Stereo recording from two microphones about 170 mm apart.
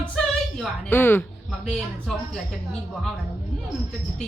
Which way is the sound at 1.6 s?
5° left (ahead or behind).